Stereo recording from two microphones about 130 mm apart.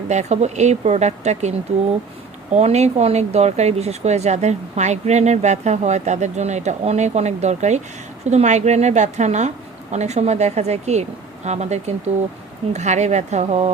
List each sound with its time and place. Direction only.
0.1 s speech: 60° right (ahead or behind)